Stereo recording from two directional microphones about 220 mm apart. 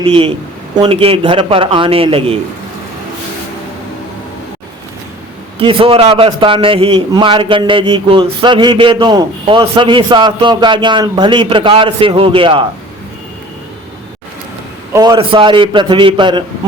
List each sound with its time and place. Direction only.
0.0 s a man's voice: 25° right (ahead or behind)
5.5 s a man's voice: 25° right (ahead or behind)
14.9 s a man's voice: 20° right (ahead or behind)